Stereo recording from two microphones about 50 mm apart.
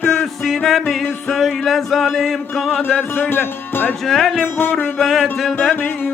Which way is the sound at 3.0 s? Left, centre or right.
Left.